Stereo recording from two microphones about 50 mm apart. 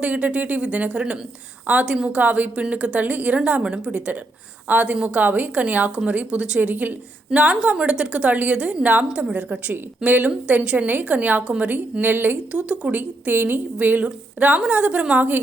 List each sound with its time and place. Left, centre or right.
0.0 s a woman's voice: right
6.6 s a woman's voice: right
7.3 s a woman's voice: right
11.7 s a woman's voice: right
12.5 s a woman's voice: right